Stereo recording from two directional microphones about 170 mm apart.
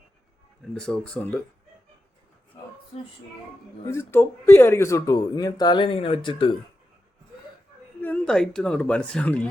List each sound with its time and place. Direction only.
0.7 s speech: 5° left (ahead or behind)
3.8 s speech: 15° left (ahead or behind); by 6.5 s 30° left (ahead or behind)
8.0 s speech: 5° left (ahead or behind)